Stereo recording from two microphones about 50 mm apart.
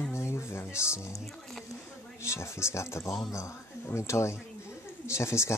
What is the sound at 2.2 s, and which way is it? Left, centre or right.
Speech, left.